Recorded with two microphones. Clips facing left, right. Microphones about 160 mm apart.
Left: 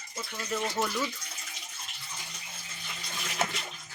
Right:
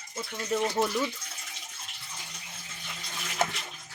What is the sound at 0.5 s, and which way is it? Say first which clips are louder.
Speech: right 4 dB; 15° right (ahead or behind).